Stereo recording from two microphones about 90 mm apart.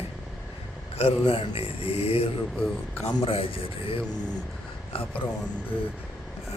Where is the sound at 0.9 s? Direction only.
90° left.